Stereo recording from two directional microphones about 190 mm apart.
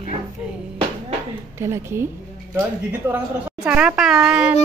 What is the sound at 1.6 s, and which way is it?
A woman's voice, 15° right (ahead or behind).